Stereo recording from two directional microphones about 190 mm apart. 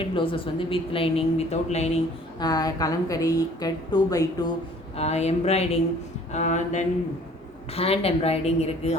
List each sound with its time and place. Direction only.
0.0 s a woman's voice: 25° left (ahead or behind)
2.4 s a woman's voice: 20° left (ahead or behind)
4.9 s a woman's voice: 35° left (ahead or behind)